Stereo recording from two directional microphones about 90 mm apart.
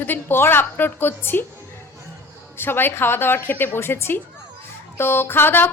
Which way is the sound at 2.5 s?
25° left (ahead or behind).